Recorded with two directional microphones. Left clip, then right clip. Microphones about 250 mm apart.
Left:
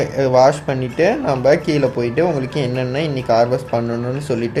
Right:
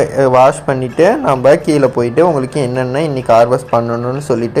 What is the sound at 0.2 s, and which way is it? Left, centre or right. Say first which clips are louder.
Speech: right 3 dB; centre.